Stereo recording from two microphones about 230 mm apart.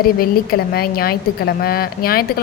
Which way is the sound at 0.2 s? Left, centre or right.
Left.